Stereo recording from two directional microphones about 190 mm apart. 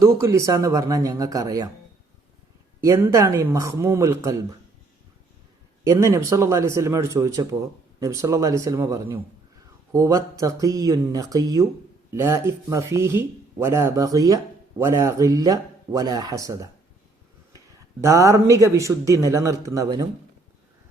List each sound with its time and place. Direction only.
0.0 s speech: 15° right (ahead or behind)
2.8 s speech: 15° right (ahead or behind)
5.8 s speech: 15° right (ahead or behind)
18.0 s speech: 15° right (ahead or behind)